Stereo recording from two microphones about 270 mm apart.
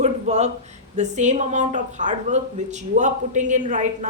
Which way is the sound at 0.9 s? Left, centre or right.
Right.